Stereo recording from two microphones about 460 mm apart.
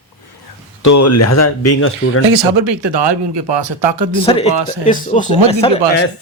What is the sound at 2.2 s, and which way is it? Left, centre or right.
Speech, right.